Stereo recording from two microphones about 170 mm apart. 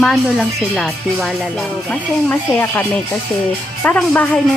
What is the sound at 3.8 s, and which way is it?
Speech, 10° left (ahead or behind).